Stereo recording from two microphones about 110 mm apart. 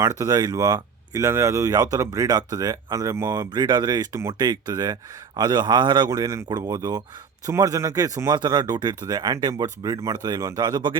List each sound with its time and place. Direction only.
0.0 s speech: 30° right (ahead or behind)
3.5 s speech: 40° right (ahead or behind)
4.1 s speech: 25° right (ahead or behind)
4.4 s speech: 40° right (ahead or behind)